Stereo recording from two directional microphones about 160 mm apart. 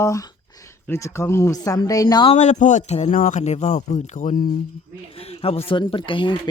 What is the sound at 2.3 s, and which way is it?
Speech, 45° left (ahead or behind).